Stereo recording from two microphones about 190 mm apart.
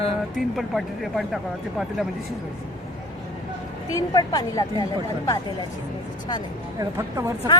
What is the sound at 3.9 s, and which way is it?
Speech, 20° left (ahead or behind).